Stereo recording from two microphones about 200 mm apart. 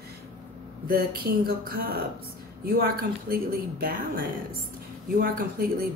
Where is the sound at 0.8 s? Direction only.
50° right (ahead or behind).